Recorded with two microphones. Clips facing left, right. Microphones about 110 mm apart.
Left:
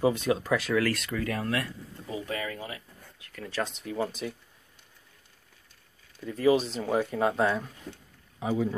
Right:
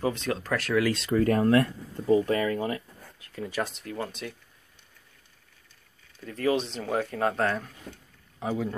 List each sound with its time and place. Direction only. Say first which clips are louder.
0.0 s speech: left 3 dB; 15° left (ahead or behind)
0.6 s speech: right 1 dB; centre (ahead or behind)
0.9 s speech: right 8 dB; 35° right (ahead or behind)
3.4 s speech: right 1 dB; 10° right (ahead or behind)
3.7 s speech: left 3 dB; 5° left (ahead or behind)
6.2 s speech: left 3 dB; 15° left (ahead or behind)
6.5 s speech: left 2 dB; 5° left (ahead or behind)